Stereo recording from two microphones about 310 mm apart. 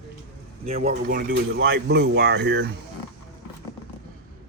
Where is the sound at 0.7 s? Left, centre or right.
Right.